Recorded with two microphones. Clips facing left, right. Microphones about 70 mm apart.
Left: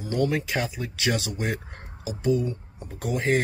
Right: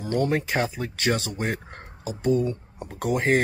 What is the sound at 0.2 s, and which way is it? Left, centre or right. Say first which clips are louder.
Speech: even; right.